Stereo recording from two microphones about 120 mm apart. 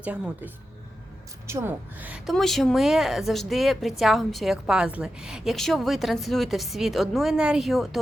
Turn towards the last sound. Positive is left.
turn(degrees=0)  # may be behind; listen again after turning